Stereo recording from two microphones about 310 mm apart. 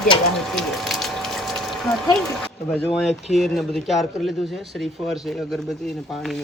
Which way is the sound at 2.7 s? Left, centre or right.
Centre.